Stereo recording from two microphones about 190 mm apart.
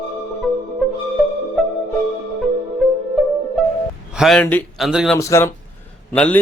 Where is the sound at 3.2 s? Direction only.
Centre (ahead or behind).